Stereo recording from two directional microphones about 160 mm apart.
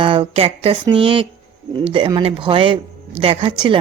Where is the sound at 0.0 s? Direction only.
30° right (ahead or behind).